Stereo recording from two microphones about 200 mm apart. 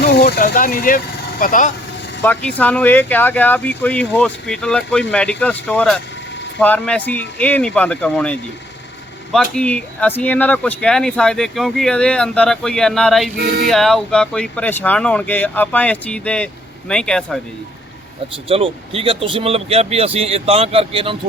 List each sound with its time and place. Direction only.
0.0 s speech: 55° left (ahead or behind)
2.2 s speech: 10° left (ahead or behind)
18.4 s speech: 30° right (ahead or behind)